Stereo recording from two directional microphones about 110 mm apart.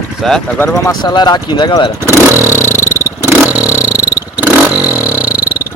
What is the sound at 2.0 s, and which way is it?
Vehicle, 20° right (ahead or behind).